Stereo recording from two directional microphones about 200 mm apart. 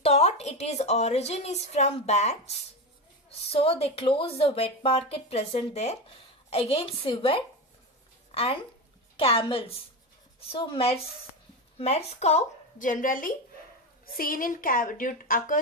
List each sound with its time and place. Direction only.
0.0 s a woman's voice: 30° left (ahead or behind)
3.5 s speech: 30° left (ahead or behind)
9.2 s a woman's voice: 25° left (ahead or behind); by 15.6 s 40° left (ahead or behind)